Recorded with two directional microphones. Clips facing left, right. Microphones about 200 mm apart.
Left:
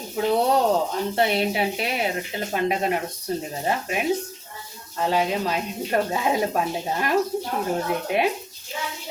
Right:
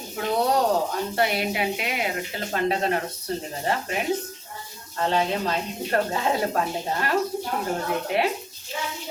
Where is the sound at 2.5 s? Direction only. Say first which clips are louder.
Even; 15° left (ahead or behind).